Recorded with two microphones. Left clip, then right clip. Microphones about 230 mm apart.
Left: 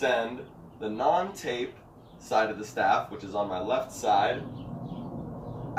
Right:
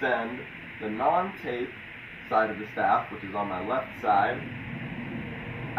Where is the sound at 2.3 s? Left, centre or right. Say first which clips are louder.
Right 1 dB; left.